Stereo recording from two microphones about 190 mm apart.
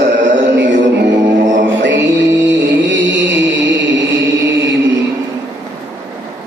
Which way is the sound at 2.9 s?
75° right (ahead or behind).